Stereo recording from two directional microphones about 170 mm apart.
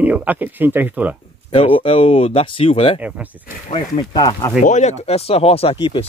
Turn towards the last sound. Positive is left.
turn(degrees=35)  # may be behind; listen again after turning